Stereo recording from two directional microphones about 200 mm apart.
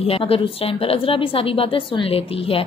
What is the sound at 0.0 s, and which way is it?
A woman's voice, 30° left (ahead or behind).